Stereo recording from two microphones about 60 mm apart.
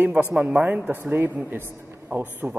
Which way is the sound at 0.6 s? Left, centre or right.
Right.